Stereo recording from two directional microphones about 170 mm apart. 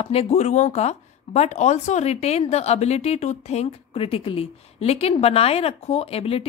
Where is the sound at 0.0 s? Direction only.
35° left (ahead or behind).